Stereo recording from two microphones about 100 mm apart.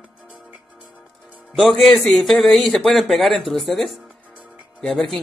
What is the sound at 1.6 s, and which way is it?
A man's voice, 5° left (ahead or behind).